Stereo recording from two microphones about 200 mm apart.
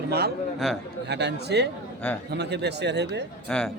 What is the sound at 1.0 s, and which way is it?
Speech, 55° right (ahead or behind).